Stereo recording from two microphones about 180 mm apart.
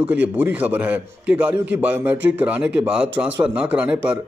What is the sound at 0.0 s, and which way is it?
Speech, 10° right (ahead or behind).